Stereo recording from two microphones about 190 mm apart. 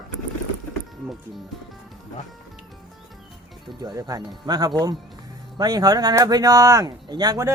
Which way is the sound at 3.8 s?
20° right (ahead or behind).